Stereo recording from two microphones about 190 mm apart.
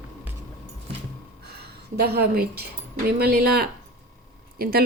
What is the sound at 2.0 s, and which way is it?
Speech, 55° right (ahead or behind).